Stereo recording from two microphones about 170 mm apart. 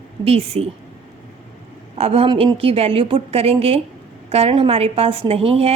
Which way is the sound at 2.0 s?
35° right (ahead or behind).